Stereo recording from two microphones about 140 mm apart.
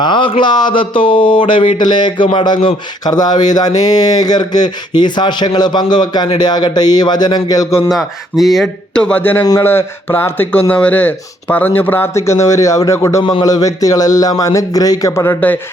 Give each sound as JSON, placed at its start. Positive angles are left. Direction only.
{"t": 0.0, "sound": "speech", "side_deg": 35}
{"t": 7.9, "sound": "speech", "side_deg": 0}
{"t": 9.4, "sound": "speech", "side_deg": 25}
{"t": 9.6, "sound": "speech", "side_deg": 15}